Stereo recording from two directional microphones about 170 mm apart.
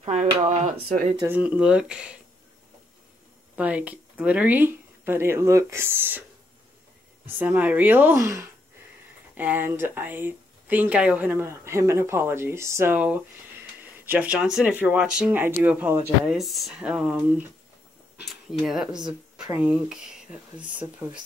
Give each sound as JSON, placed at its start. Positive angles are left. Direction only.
{"t": 0.0, "sound": "a sound", "side_deg": -40}
{"t": 1.2, "sound": "speech", "side_deg": -10}
{"t": 3.5, "sound": "speech", "side_deg": -10}
{"t": 7.3, "sound": "speech", "side_deg": -10}